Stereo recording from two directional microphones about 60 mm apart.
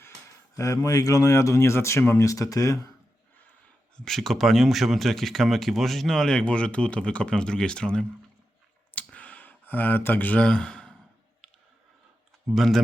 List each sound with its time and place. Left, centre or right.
0.5 s speech: left
2.1 s speech: left
3.9 s speech: centre
9.1 s a sound: left
10.4 s speech: centre
12.5 s speech: centre